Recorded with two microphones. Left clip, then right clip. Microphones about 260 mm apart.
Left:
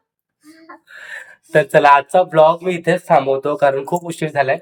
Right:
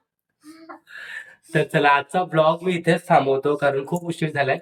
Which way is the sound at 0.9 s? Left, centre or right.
Centre.